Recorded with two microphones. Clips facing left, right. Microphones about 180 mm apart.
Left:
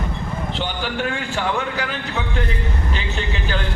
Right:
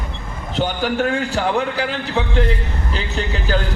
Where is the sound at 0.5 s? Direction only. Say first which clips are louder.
Right 9 dB; 45° right (ahead or behind).